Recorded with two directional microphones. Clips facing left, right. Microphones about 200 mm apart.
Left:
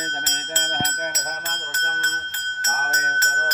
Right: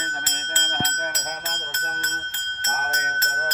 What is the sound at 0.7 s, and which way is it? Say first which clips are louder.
Speech: even; 15° left (ahead or behind).